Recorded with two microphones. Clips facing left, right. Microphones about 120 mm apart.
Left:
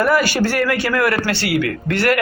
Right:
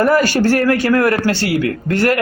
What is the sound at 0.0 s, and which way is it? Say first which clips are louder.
Speech: right 3 dB; 40° right (ahead or behind).